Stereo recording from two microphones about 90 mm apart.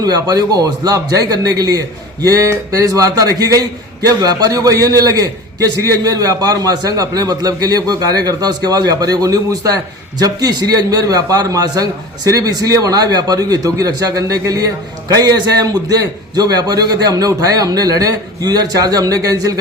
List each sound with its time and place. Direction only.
0.0 s a man's voice: 45° right (ahead or behind)